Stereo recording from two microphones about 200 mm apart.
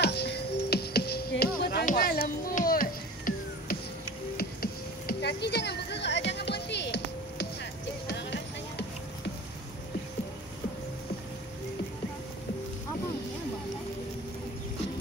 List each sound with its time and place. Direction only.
0.0 s music: 55° left (ahead or behind)
4.4 s a sound: 50° left (ahead or behind)
8.1 s music: 60° left (ahead or behind)